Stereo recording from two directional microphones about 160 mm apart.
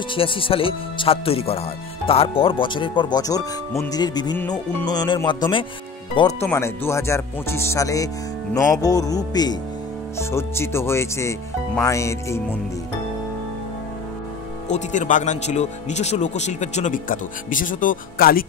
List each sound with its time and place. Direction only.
0.1 s speech: 35° left (ahead or behind)
6.4 s speech: 15° left (ahead or behind)
14.7 s speech: 50° left (ahead or behind)